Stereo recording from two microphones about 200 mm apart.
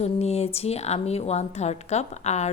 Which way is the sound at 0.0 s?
30° left (ahead or behind).